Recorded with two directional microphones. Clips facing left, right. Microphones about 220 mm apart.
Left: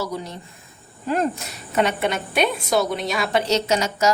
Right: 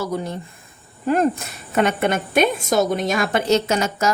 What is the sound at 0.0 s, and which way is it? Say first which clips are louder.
A woman's voice: right 3 dB; 50° right (ahead or behind).